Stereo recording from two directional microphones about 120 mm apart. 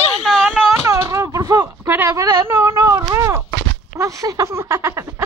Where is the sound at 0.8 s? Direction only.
25° right (ahead or behind).